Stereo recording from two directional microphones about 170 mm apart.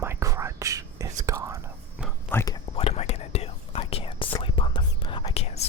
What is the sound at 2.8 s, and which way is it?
Whispering, 40° left (ahead or behind).